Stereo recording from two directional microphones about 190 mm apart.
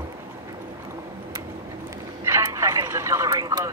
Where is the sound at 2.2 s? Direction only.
15° right (ahead or behind).